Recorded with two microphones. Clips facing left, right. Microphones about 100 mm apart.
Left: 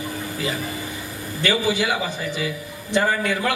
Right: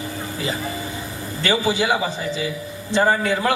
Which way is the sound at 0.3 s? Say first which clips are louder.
Right 2 dB; 25° right (ahead or behind).